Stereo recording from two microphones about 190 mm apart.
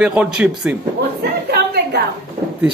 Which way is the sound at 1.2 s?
55° right (ahead or behind).